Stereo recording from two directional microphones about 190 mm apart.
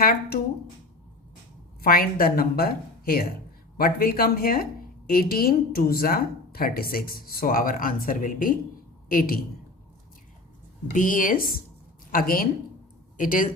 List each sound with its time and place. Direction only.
0.0 s a woman's voice: 50° left (ahead or behind)
1.8 s a woman's voice: 50° left (ahead or behind)
10.9 s a woman's voice: 45° left (ahead or behind)